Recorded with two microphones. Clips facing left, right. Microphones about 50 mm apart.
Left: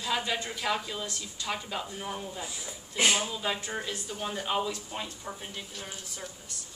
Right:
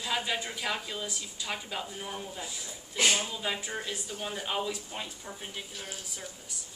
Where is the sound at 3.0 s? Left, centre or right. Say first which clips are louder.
Left 1 dB; centre.